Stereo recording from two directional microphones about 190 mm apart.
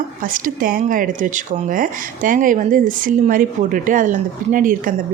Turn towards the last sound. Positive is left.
turn(degrees=-45)  # may be behind; listen again after turning